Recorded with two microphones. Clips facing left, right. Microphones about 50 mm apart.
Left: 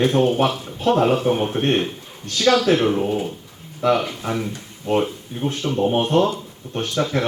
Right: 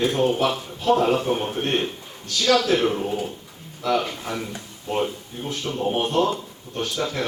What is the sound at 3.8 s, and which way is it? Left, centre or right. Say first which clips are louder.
Speech: left 4 dB; left.